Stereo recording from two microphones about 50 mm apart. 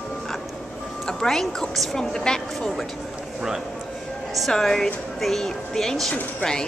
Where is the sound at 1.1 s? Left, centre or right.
Centre.